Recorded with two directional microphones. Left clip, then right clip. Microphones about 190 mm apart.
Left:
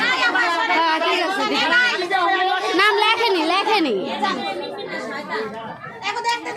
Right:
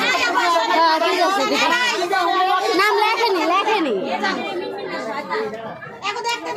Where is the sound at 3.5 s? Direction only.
30° left (ahead or behind).